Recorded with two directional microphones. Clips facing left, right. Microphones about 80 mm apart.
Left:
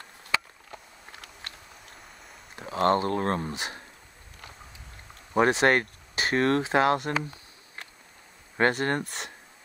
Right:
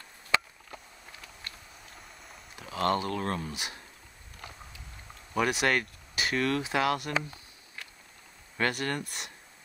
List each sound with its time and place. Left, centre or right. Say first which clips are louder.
2.5 s speech: left 5 dB; left
5.3 s speech: left 6 dB; left
8.5 s speech: left 6 dB; left